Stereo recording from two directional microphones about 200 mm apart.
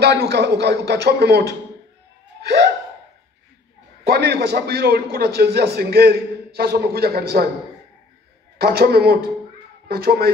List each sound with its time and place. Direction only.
0.0 s speech: 55° right (ahead or behind)
2.4 s gasp: 55° right (ahead or behind)
4.0 s a man's voice: 55° right (ahead or behind)
8.5 s a man's voice: 50° right (ahead or behind)